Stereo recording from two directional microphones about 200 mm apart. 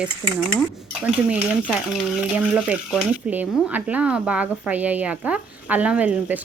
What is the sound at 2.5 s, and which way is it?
Speech, 5° right (ahead or behind).